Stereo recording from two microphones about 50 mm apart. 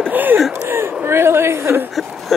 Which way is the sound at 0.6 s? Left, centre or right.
Right.